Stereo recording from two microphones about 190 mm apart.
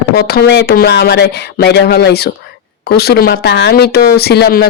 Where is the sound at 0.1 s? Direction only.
55° left (ahead or behind).